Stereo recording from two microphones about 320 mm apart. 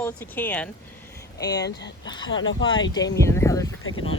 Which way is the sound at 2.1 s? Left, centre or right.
Centre.